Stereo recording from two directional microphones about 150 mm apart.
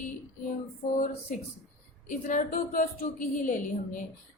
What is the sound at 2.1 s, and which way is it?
A woman's voice, 60° left (ahead or behind).